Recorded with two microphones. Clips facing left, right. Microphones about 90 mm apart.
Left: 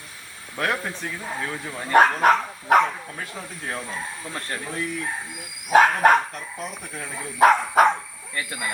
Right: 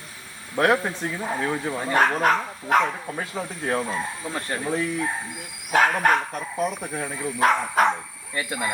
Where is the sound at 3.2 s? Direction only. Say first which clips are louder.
Right 5 dB; 20° right (ahead or behind).